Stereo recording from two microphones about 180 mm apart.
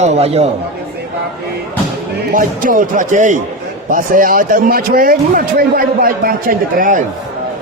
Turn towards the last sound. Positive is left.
turn(degrees=-50)  # may be behind; listen again after turning